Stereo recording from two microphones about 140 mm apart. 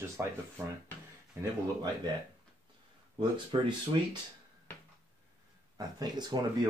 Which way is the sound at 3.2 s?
35° right (ahead or behind).